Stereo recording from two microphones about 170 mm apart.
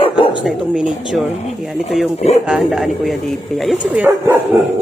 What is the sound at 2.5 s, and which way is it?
Speech, centre (ahead or behind).